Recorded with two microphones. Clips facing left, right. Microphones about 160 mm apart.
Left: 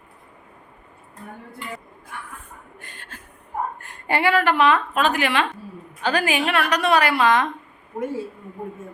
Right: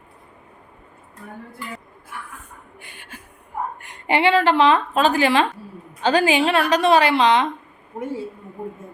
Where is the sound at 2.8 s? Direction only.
10° right (ahead or behind).